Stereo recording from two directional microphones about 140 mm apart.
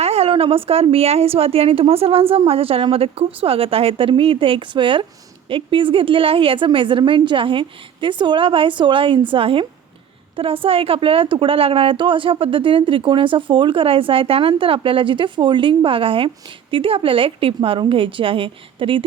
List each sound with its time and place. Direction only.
0.0 s a woman's voice: 45° right (ahead or behind)